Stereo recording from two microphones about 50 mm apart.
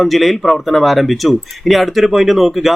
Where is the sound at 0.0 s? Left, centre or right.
Centre.